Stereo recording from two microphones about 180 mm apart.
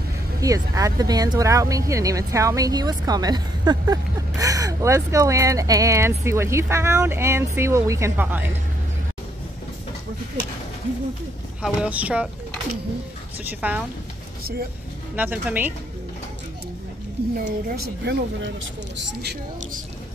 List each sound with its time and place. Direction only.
0.4 s speech: 20° right (ahead or behind)
11.6 s speech: 5° right (ahead or behind)
13.4 s speech: 10° right (ahead or behind)
15.1 s speech: 10° right (ahead or behind)
17.5 s speech: 65° right (ahead or behind)